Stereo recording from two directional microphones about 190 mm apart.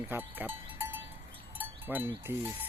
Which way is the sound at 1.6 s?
10° right (ahead or behind).